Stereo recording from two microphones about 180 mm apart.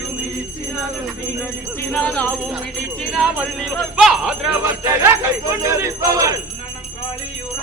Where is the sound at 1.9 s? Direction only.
5° left (ahead or behind).